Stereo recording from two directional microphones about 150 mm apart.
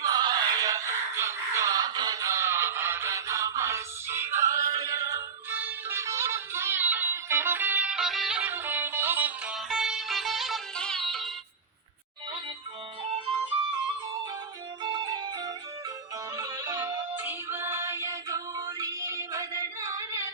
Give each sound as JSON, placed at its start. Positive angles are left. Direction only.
{"t": 0.0, "sound": "music", "side_deg": -25}
{"t": 14.8, "sound": "music", "side_deg": -30}